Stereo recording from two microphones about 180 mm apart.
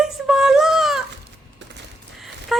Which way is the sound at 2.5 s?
Centre (ahead or behind).